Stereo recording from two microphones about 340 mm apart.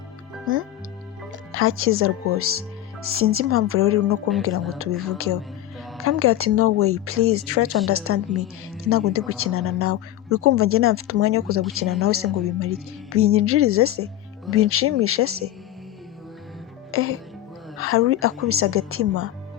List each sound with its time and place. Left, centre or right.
0.5 s a woman's voice: right
16.9 s a woman's voice: right